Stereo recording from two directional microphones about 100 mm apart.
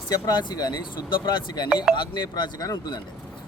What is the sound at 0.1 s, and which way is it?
Speech, 45° left (ahead or behind).